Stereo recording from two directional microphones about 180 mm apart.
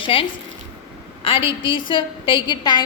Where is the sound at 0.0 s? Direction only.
30° left (ahead or behind).